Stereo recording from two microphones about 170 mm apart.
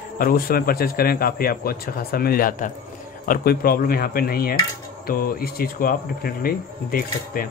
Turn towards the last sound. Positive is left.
turn(degrees=60)  # may be behind; listen again after turning